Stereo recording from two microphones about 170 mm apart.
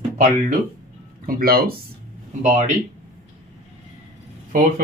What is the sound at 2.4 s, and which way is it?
Speech, 45° right (ahead or behind).